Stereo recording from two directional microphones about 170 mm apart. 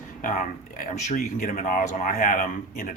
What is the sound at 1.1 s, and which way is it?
A man's voice, 50° left (ahead or behind).